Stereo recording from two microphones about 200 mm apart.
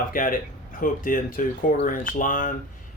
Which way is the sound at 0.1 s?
45° left (ahead or behind).